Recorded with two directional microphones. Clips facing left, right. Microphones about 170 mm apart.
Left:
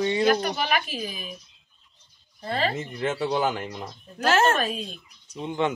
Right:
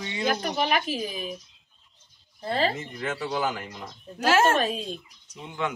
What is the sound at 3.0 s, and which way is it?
Speech, 25° left (ahead or behind).